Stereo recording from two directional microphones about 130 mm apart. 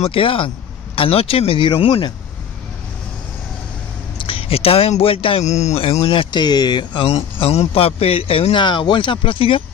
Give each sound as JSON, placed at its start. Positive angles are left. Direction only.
{"t": 0.0, "sound": "a man's voice", "side_deg": 45}
{"t": 4.2, "sound": "a man's voice", "side_deg": 45}
{"t": 6.3, "sound": "speech", "side_deg": 35}
{"t": 7.1, "sound": "a man's voice", "side_deg": 50}